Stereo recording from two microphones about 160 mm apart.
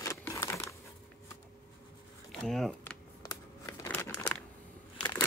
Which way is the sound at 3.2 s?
20° left (ahead or behind).